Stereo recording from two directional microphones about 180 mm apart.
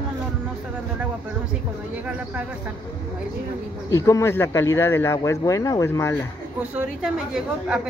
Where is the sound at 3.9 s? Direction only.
20° left (ahead or behind).